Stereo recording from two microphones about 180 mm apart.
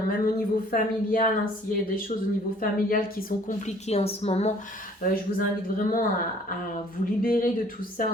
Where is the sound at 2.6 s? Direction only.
50° left (ahead or behind).